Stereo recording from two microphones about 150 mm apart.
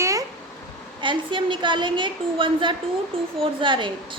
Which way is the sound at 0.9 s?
30° right (ahead or behind).